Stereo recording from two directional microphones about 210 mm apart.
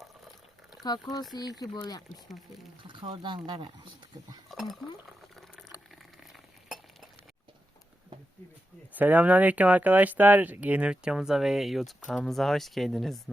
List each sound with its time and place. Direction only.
1.3 s speech: 20° left (ahead or behind)
2.8 s speech: 20° right (ahead or behind)
4.4 s a sound: centre (ahead or behind)
9.0 s speech: 5° right (ahead or behind)